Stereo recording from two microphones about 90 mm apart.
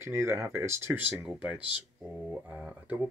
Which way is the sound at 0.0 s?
30° right (ahead or behind).